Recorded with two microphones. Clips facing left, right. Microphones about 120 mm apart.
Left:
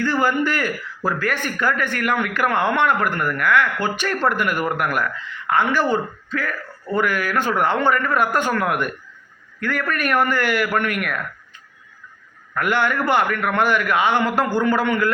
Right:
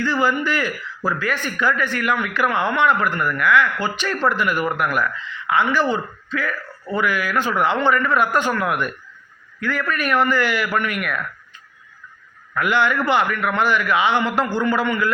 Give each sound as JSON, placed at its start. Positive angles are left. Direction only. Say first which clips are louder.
{"t": 0.0, "sound": "speech", "louder": "left 1 dB", "side_deg": 50}
{"t": 12.5, "sound": "speech", "louder": "right 1 dB", "side_deg": 50}